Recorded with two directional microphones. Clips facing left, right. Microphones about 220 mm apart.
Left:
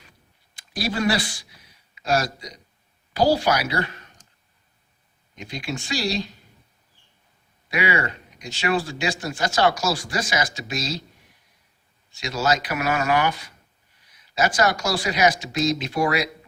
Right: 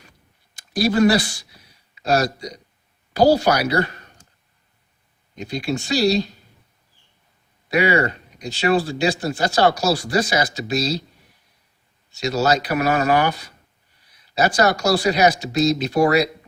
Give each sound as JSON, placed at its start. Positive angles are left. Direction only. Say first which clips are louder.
{"t": 0.8, "sound": "speech", "louder": "right 7 dB", "side_deg": -45}
{"t": 5.4, "sound": "speech", "louder": "right 6 dB", "side_deg": -35}
{"t": 7.7, "sound": "speech", "louder": "right 6 dB", "side_deg": -40}
{"t": 12.1, "sound": "speech", "louder": "right 4 dB", "side_deg": -40}